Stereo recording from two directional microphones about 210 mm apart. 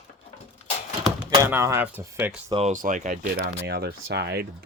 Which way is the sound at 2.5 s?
30° right (ahead or behind).